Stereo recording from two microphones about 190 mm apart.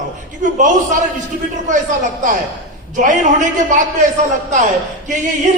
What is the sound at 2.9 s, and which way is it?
A man's voice, 40° right (ahead or behind).